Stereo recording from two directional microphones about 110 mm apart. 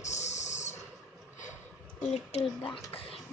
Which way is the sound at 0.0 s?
90° left.